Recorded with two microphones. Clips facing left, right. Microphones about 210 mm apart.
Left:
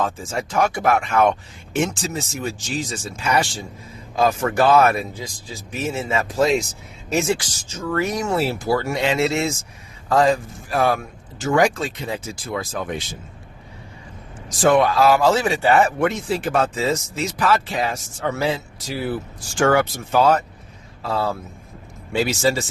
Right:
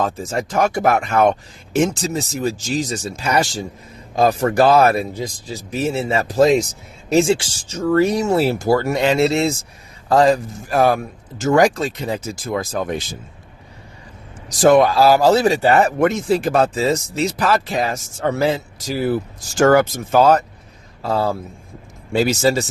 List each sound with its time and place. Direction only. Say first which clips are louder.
0.0 s speech: right 3 dB; 40° right (ahead or behind)
8.4 s speech: right 5 dB; 40° right (ahead or behind)
14.6 s speech: right 4 dB; 40° right (ahead or behind)